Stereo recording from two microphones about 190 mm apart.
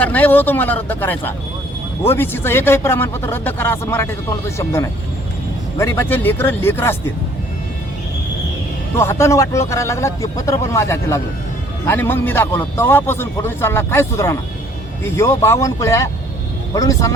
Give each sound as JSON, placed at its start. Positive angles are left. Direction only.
{"t": 0.0, "sound": "a man's voice", "side_deg": 10}
{"t": 9.0, "sound": "a man's voice", "side_deg": 15}